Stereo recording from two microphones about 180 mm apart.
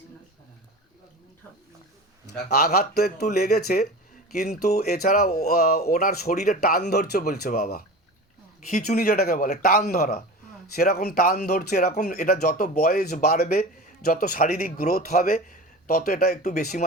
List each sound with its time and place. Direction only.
2.2 s speech: 60° left (ahead or behind)
8.7 s speech: 45° left (ahead or behind)